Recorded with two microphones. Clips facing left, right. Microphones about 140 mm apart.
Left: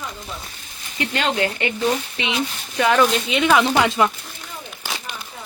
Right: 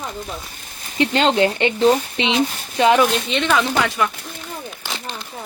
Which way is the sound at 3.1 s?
5° left (ahead or behind).